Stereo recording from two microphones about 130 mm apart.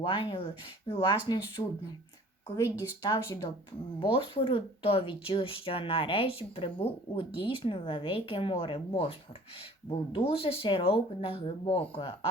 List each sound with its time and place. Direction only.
0.0 s speech: 40° left (ahead or behind)
2.6 s speech: 15° right (ahead or behind)
3.0 s speech: 35° left (ahead or behind)